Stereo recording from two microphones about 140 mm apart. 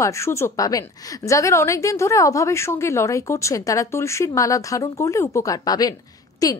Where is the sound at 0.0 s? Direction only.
20° left (ahead or behind).